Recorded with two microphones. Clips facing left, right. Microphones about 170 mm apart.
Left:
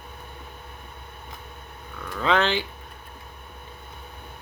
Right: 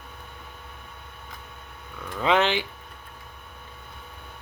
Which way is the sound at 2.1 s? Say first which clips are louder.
Even; 15° right (ahead or behind).